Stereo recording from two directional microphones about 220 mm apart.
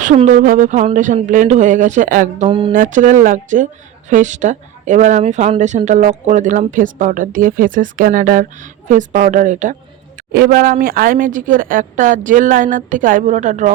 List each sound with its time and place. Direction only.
0.0 s speech: 35° right (ahead or behind)
2.5 s mantra: 25° right (ahead or behind)
2.7 s speech: 35° right (ahead or behind)